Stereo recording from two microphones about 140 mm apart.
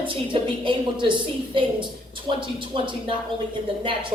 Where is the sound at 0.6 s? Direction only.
35° right (ahead or behind).